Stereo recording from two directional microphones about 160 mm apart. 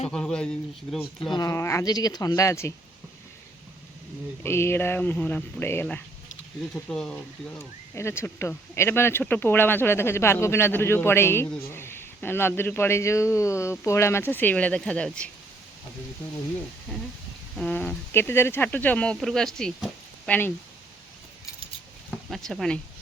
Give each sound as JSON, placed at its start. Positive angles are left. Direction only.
{"t": 0.1, "sound": "speech", "side_deg": 5}
{"t": 1.2, "sound": "speech", "side_deg": 25}
{"t": 4.4, "sound": "a man's voice", "side_deg": 15}
{"t": 7.9, "sound": "a man's voice", "side_deg": 15}
{"t": 17.6, "sound": "a man's voice", "side_deg": 5}
{"t": 22.1, "sound": "speech", "side_deg": 0}